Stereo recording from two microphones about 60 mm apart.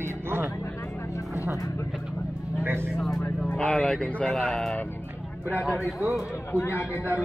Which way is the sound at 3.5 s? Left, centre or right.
Centre.